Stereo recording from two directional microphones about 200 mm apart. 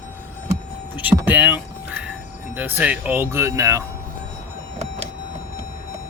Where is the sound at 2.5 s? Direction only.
10° right (ahead or behind).